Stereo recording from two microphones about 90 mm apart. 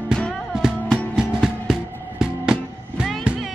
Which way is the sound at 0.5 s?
5° right (ahead or behind).